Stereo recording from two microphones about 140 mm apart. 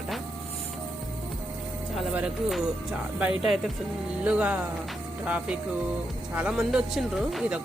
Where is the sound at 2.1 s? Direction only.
5° right (ahead or behind).